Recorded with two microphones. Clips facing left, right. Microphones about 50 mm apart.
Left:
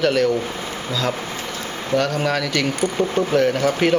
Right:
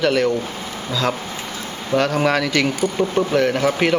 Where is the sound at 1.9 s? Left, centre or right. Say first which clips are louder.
Right 1 dB; centre.